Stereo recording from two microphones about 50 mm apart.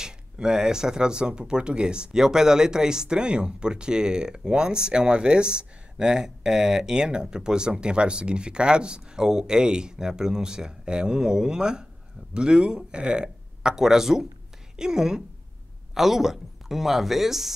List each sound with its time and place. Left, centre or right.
0.0 s speech: centre